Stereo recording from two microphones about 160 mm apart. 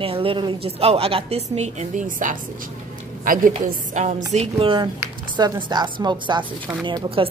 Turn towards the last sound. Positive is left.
turn(degrees=-30)  # may be behind; listen again after turning